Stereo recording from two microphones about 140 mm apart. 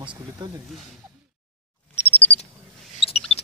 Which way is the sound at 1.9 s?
45° left (ahead or behind).